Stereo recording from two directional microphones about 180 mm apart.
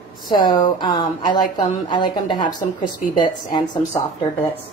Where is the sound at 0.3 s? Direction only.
25° left (ahead or behind).